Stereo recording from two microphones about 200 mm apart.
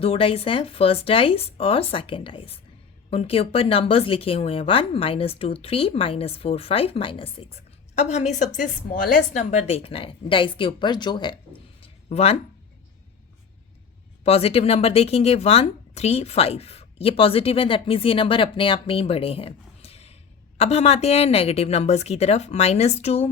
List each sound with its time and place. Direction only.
0.0 s speech: 30° left (ahead or behind)
11.8 s a sound: 30° left (ahead or behind)
14.3 s a woman's voice: 30° left (ahead or behind)